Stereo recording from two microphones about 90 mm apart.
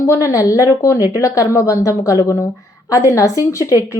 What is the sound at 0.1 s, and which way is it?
A woman's voice, 35° left (ahead or behind).